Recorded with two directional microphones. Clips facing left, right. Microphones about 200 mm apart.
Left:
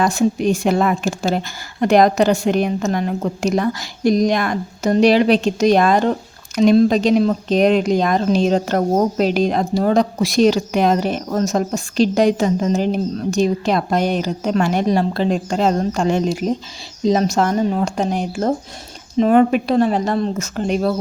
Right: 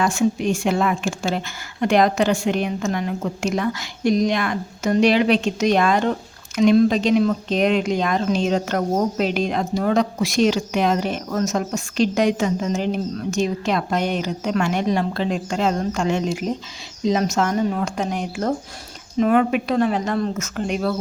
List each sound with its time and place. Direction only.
0.0 s a woman's voice: 35° left (ahead or behind)